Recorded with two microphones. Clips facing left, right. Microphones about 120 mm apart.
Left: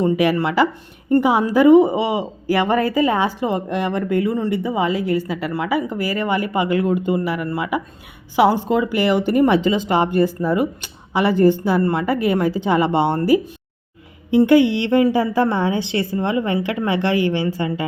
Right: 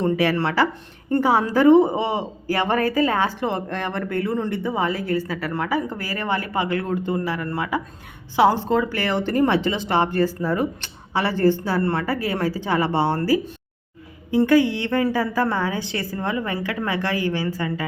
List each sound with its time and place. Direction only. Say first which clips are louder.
0.0 s a woman's voice: left 3 dB; 10° left (ahead or behind)